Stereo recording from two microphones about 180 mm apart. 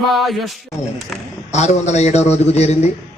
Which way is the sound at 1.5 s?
40° left (ahead or behind).